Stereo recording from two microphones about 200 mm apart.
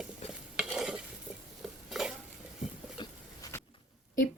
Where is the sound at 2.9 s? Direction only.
15° left (ahead or behind).